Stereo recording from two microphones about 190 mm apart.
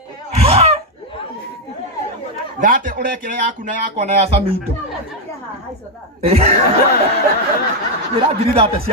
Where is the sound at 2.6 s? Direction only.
45° right (ahead or behind).